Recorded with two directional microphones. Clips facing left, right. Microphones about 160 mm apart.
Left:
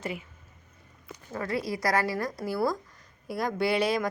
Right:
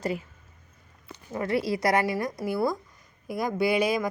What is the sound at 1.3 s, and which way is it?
A woman's voice, 25° right (ahead or behind).